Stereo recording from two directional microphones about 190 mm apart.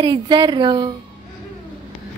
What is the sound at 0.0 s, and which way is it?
Speech, 25° right (ahead or behind).